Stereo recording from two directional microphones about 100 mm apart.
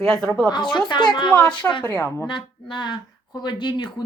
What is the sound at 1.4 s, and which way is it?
Speech, 10° left (ahead or behind).